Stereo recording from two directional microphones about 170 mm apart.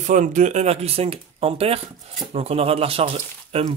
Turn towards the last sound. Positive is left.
turn(degrees=-35)  # may be behind; listen again after turning